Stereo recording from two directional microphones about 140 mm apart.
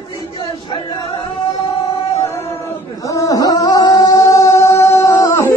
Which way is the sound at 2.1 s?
50° left (ahead or behind).